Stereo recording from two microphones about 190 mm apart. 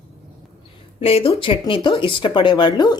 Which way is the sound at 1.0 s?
30° left (ahead or behind).